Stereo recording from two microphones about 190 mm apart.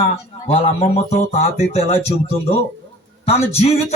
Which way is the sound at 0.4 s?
35° left (ahead or behind).